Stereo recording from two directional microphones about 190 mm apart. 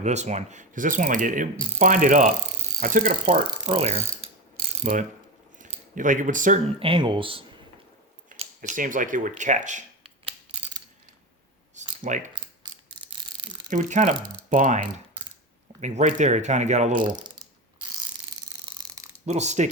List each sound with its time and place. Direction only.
0.0 s speech: 35° right (ahead or behind)
3.4 s speech: 30° right (ahead or behind)
4.9 s speech: 45° right (ahead or behind)
6.7 s speech: 30° right (ahead or behind)
8.3 s speech: 40° right (ahead or behind)
12.0 s speech: 40° right (ahead or behind)
12.3 s mechanisms: 25° right (ahead or behind)
13.7 s speech: 40° right (ahead or behind)
17.1 s speech: 25° right (ahead or behind)
17.8 s mechanisms: 25° right (ahead or behind)
19.2 s speech: 35° right (ahead or behind)